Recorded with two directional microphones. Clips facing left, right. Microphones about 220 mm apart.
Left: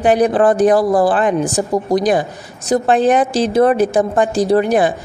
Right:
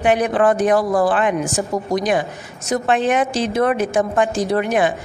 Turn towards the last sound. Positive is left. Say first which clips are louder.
# left 5 dB
turn(degrees=35)  # may be behind; listen again after turning